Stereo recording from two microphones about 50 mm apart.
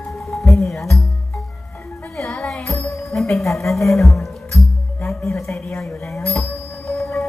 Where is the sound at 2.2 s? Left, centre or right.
Centre.